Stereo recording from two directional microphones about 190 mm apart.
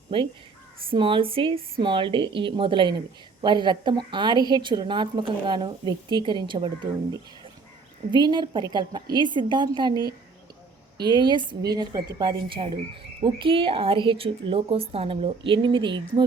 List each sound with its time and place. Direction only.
0.1 s a woman's voice: 25° right (ahead or behind)
8.1 s a woman's voice: 25° right (ahead or behind)